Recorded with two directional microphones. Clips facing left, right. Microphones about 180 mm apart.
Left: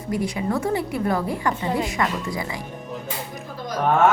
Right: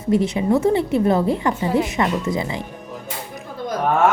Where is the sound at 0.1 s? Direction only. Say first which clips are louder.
Right 7 dB; 25° right (ahead or behind).